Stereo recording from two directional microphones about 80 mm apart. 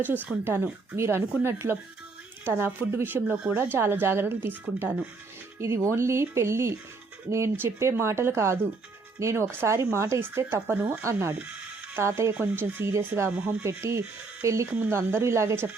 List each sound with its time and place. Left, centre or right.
0.4 s a woman's voice: right
12.3 s a woman's voice: centre
13.7 s speech: right
14.7 s a woman's voice: right
14.9 s speech: right